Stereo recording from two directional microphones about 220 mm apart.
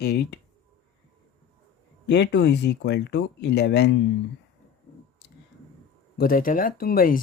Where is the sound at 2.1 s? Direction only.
50° left (ahead or behind).